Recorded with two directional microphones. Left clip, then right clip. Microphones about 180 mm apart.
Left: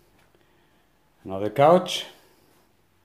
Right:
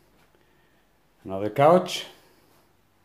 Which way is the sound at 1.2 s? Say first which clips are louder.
Left 1 dB; 10° left (ahead or behind).